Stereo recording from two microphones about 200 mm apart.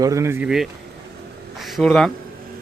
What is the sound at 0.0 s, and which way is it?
Speech, 15° right (ahead or behind).